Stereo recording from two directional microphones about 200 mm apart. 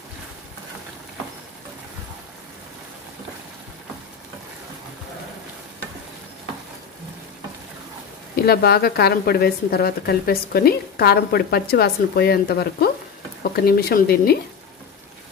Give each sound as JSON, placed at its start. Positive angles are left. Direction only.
{"t": 8.5, "sound": "speech", "side_deg": 50}